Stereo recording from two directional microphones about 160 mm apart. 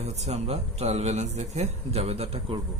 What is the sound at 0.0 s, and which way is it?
Speech, 45° right (ahead or behind).